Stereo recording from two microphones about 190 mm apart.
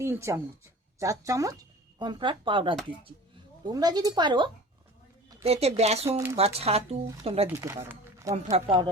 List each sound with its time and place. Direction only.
0.0 s a woman's voice: 15° right (ahead or behind); by 6.1 s 35° right (ahead or behind)
6.1 s speech: 15° right (ahead or behind)
6.3 s a woman's voice: 30° right (ahead or behind)
7.6 s speech: 15° right (ahead or behind)
8.4 s speech: 30° right (ahead or behind)